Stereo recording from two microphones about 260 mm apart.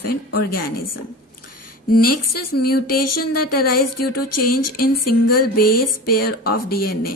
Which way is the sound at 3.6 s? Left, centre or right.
Left.